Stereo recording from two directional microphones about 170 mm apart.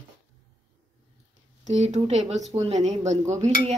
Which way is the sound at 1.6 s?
40° right (ahead or behind).